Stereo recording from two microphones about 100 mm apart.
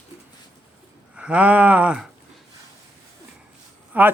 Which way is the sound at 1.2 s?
10° right (ahead or behind).